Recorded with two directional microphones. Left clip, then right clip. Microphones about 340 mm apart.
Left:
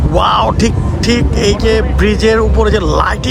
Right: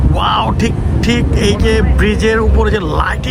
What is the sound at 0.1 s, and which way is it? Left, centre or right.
Speech, centre.